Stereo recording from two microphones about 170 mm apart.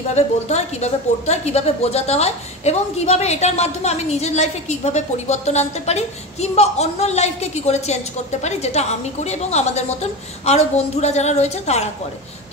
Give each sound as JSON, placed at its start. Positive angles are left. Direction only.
{"t": 0.1, "sound": "a woman's voice", "side_deg": 40}